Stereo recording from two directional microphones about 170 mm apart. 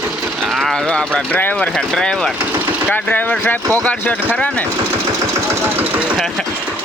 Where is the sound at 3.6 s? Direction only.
20° right (ahead or behind).